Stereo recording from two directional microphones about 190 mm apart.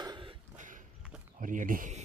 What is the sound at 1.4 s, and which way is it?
Speech, 45° right (ahead or behind).